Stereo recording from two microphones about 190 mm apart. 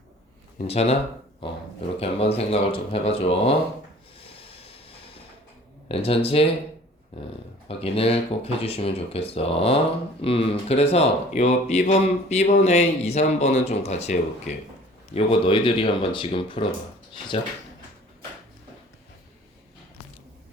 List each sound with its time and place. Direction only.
0.6 s speech: 35° left (ahead or behind)
5.9 s speech: 30° left (ahead or behind)
7.7 s speech: 30° left (ahead or behind)